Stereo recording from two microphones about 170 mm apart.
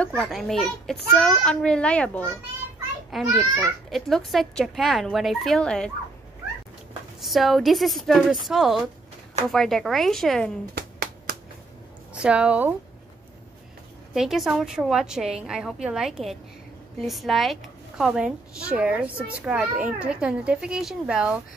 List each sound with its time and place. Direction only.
0.2 s a woman's voice: centre (ahead or behind)
3.1 s a woman's voice: 5° right (ahead or behind)
4.1 s a woman's voice: centre (ahead or behind)
7.2 s a woman's voice: centre (ahead or behind)
10.7 s a sound: 65° right (ahead or behind)
12.1 s a woman's voice: 5° right (ahead or behind)
14.1 s a woman's voice: centre (ahead or behind)